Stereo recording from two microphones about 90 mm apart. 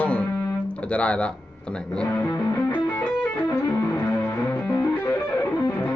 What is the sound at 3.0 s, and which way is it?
Music, 20° left (ahead or behind).